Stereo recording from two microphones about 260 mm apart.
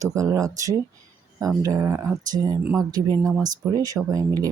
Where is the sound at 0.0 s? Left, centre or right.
Centre.